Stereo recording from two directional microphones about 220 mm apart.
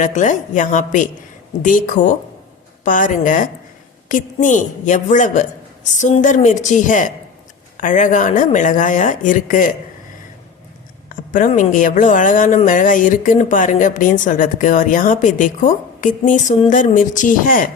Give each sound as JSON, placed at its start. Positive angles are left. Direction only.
{"t": 0.0, "sound": "speech", "side_deg": 35}
{"t": 11.1, "sound": "speech", "side_deg": 35}